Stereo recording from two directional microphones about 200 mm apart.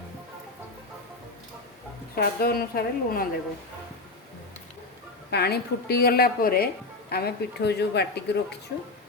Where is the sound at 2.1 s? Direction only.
50° left (ahead or behind).